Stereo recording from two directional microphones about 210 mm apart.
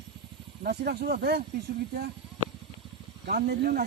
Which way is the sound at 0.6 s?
45° right (ahead or behind).